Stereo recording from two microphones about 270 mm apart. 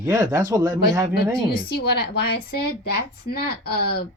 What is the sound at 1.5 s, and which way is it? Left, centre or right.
A woman's voice, left.